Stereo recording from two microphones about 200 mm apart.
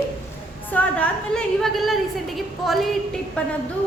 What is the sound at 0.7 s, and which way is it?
A woman's voice, 5° left (ahead or behind).